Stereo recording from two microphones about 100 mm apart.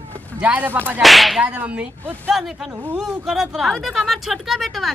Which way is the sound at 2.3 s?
Centre (ahead or behind).